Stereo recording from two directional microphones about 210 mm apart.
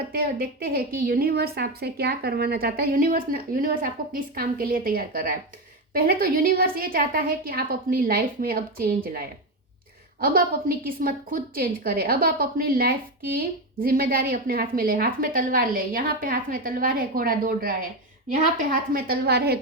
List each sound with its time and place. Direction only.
0.1 s a woman's voice: 45° right (ahead or behind)
10.2 s a woman's voice: 45° right (ahead or behind)